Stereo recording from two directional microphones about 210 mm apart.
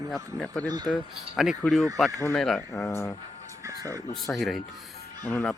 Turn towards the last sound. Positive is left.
turn(degrees=10)  # may be behind; listen again after turning